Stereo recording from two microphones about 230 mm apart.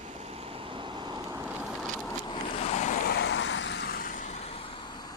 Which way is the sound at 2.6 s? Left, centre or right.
Left.